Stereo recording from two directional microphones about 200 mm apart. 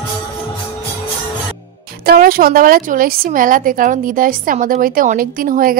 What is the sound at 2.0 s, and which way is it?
A woman's voice, 50° right (ahead or behind).